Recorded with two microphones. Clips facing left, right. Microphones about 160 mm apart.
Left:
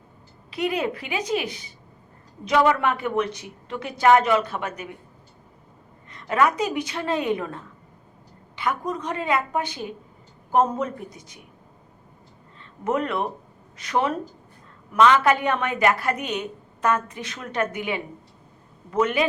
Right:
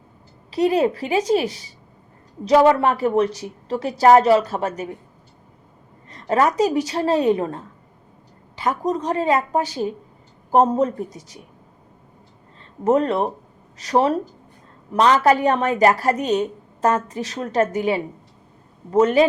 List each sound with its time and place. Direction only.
0.5 s a woman's voice: 35° right (ahead or behind)
6.1 s a woman's voice: 35° right (ahead or behind)
12.8 s a woman's voice: 35° right (ahead or behind)